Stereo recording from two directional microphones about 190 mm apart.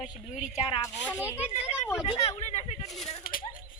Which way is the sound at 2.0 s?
35° left (ahead or behind).